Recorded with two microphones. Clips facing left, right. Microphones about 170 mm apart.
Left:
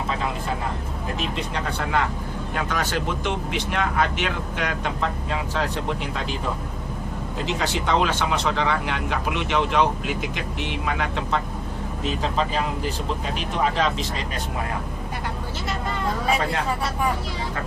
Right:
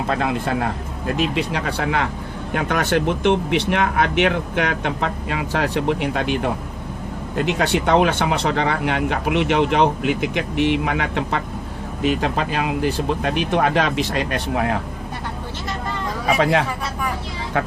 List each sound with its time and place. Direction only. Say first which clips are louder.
0.1 s speech: right 8 dB; 70° right (ahead or behind); by 14.8 s 85° right
16.4 s speech: right 8 dB; 80° right